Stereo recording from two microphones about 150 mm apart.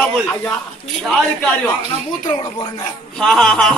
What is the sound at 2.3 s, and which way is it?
Speech, 30° left (ahead or behind).